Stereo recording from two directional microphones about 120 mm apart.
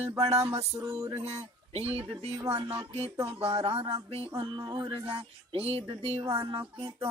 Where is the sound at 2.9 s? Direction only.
55° right (ahead or behind).